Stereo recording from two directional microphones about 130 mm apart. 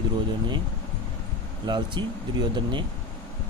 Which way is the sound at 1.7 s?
35° right (ahead or behind).